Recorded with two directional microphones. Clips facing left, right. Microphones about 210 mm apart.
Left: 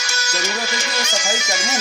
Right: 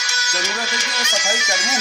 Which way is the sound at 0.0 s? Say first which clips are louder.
Left 2 dB; 55° left (ahead or behind).